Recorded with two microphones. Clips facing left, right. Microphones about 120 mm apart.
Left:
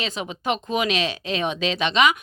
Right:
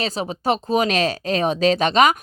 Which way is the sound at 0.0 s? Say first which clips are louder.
Right 5 dB; 35° right (ahead or behind).